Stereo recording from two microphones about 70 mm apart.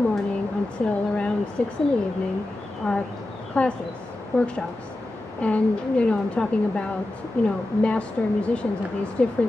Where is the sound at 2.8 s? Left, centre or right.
Centre.